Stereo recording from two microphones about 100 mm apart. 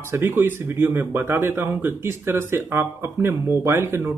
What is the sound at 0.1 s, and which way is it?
A man's voice, 25° right (ahead or behind).